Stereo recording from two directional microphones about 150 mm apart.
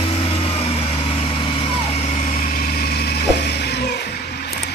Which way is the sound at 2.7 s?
90° left.